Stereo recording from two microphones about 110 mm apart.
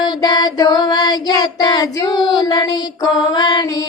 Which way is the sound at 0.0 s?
40° left (ahead or behind).